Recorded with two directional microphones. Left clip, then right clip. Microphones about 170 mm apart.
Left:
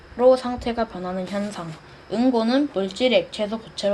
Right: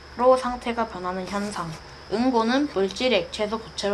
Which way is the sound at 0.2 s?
65° left (ahead or behind).